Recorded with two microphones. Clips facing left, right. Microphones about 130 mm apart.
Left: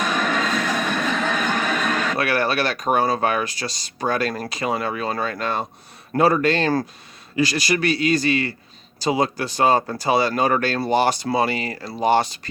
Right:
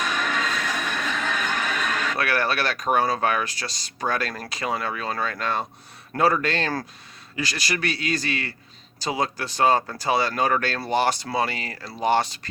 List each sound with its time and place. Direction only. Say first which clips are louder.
0.0 s music: left 4 dB; 40° left (ahead or behind)
2.1 s speech: left 2 dB; 5° left (ahead or behind)